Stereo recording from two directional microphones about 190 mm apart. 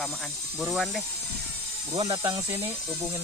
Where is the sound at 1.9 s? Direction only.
30° right (ahead or behind).